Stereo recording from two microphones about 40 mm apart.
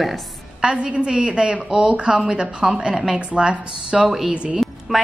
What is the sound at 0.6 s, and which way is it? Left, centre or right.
A woman's voice, right.